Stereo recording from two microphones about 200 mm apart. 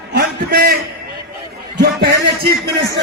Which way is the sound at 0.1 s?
50° right (ahead or behind).